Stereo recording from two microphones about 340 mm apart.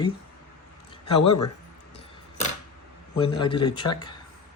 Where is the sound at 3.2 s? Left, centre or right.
Centre.